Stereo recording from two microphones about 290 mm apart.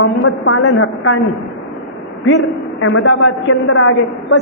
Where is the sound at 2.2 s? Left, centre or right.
Left.